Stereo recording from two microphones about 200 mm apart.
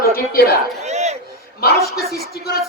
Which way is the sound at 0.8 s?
35° right (ahead or behind).